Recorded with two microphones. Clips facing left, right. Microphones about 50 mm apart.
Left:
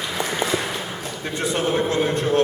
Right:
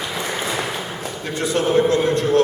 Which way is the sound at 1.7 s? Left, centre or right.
Left.